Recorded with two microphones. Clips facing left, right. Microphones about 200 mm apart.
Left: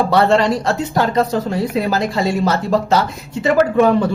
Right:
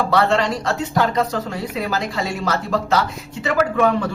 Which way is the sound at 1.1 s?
30° left (ahead or behind).